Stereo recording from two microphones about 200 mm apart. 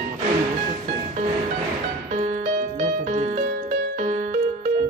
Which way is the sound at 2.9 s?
35° right (ahead or behind).